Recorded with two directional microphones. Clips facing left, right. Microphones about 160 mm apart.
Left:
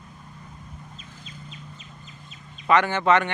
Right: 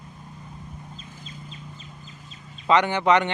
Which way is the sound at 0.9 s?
35° right (ahead or behind).